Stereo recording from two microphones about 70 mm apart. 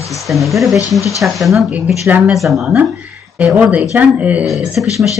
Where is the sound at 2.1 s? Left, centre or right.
Right.